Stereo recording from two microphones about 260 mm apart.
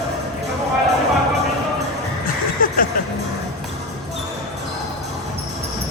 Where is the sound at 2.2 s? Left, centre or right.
Left.